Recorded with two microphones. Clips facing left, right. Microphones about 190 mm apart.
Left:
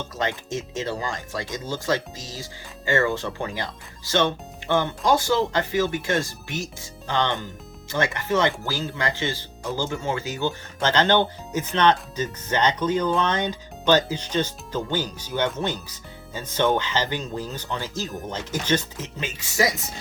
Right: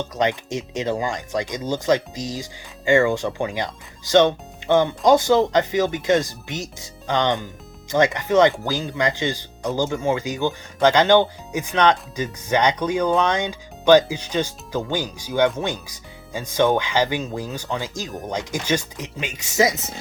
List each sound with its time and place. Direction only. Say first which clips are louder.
0.2 s speech: right 5 dB; 15° right (ahead or behind)